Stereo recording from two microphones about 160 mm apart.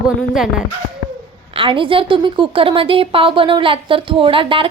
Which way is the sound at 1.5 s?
30° right (ahead or behind).